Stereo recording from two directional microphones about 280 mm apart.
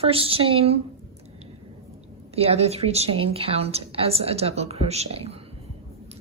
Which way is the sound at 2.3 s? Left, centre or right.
Right.